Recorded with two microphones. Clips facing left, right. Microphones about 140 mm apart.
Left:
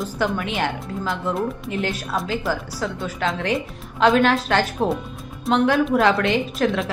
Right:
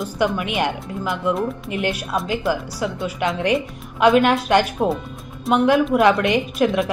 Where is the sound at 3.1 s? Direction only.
15° right (ahead or behind).